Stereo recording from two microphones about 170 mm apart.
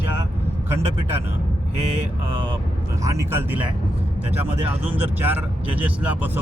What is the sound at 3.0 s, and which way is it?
Speech, 15° right (ahead or behind).